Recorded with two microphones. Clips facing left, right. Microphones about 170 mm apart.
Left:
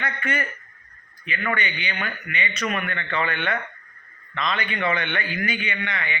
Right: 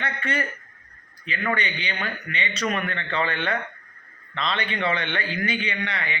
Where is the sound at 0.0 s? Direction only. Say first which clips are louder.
Even; 30° right (ahead or behind).